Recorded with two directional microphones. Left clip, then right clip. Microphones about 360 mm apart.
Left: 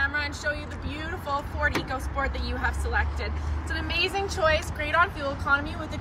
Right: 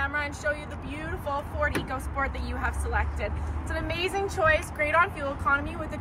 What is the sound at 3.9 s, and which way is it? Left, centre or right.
Speech, centre.